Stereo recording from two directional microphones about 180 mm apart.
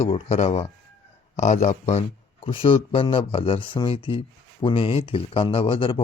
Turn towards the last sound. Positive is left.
turn(degrees=30)  # may be behind; listen again after turning